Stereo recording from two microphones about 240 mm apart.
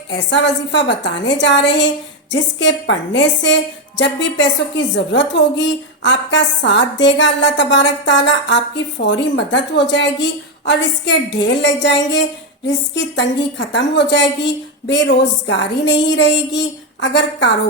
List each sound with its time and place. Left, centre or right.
0.1 s a woman's voice: left